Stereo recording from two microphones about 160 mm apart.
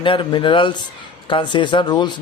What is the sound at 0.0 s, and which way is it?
Speech, 30° left (ahead or behind).